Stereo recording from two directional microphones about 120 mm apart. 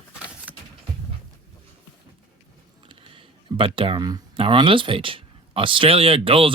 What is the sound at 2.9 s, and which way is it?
Computer keyboard, 45° right (ahead or behind).